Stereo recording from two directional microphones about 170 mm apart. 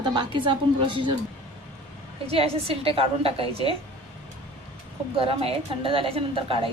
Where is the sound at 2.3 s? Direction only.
35° right (ahead or behind).